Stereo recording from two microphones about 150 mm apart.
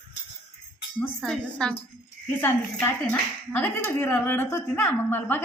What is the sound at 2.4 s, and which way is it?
A woman's voice, 15° left (ahead or behind).